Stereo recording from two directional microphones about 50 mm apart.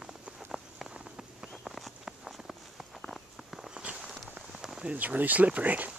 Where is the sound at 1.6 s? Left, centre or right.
Centre.